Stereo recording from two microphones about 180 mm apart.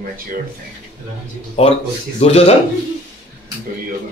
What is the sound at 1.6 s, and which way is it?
Speech, 35° left (ahead or behind).